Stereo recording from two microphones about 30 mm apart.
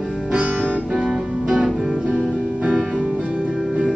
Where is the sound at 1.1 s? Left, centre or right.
Centre.